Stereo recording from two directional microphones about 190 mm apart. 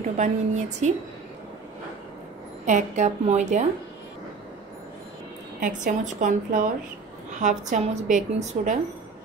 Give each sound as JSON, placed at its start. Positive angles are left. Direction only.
{"t": 0.2, "sound": "speech", "side_deg": -40}
{"t": 2.6, "sound": "speech", "side_deg": -40}
{"t": 5.6, "sound": "a woman's voice", "side_deg": -45}